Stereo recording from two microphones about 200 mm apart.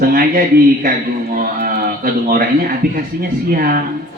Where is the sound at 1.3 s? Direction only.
45° right (ahead or behind).